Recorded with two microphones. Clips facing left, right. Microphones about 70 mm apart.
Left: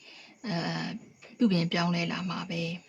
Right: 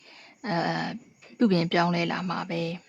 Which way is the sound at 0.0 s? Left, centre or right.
Right.